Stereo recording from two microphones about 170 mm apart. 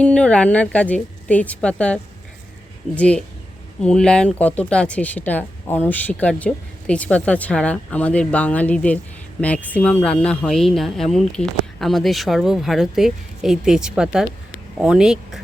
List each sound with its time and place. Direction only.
0.0 s speech: 5° left (ahead or behind)